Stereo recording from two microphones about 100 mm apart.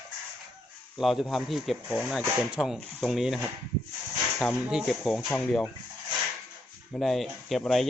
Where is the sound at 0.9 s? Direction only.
5° right (ahead or behind).